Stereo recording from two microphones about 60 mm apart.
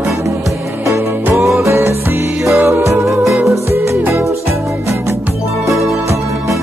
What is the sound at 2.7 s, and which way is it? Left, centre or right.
Music, right.